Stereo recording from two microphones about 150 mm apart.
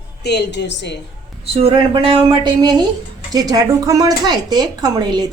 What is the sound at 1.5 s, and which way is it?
A woman's voice, 35° right (ahead or behind).